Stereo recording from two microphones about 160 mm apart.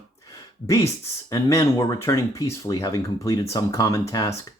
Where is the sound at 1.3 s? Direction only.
20° left (ahead or behind).